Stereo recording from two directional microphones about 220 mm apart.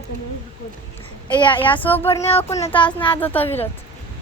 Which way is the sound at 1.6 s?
10° left (ahead or behind).